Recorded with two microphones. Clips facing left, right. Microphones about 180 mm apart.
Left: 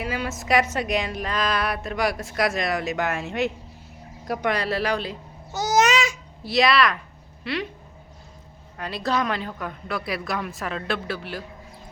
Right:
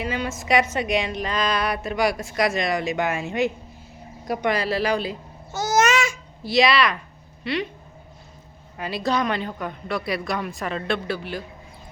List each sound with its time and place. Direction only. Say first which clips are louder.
0.0 s a woman's voice: right 1 dB; 5° left (ahead or behind)
5.5 s babbling: even; 15° left (ahead or behind)
6.4 s a woman's voice: right 1 dB; centre (ahead or behind)
8.8 s a woman's voice: right 2 dB; centre (ahead or behind)